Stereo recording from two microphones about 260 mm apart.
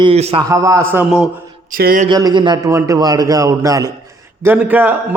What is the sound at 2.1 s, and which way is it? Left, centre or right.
A man's voice, centre.